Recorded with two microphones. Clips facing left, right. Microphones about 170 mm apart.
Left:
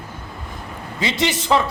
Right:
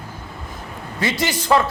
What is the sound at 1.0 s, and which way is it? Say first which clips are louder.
Speech: left 1 dB; 20° left (ahead or behind).